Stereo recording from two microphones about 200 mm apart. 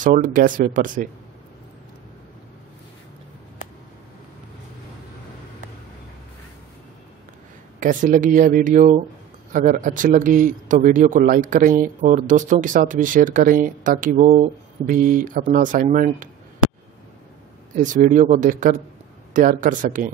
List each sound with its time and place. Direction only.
0.0 s speech: 40° right (ahead or behind)
7.8 s speech: 40° right (ahead or behind)
17.7 s speech: 40° right (ahead or behind)